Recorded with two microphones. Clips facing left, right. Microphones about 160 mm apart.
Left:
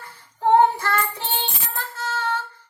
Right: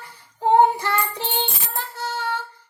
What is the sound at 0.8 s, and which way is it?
Child singing, 15° right (ahead or behind).